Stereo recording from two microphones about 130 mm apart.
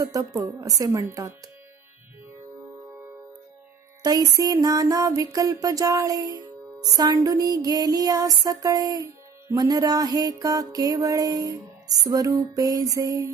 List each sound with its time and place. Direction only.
0.0 s music: 25° right (ahead or behind)
4.0 s music: 30° right (ahead or behind)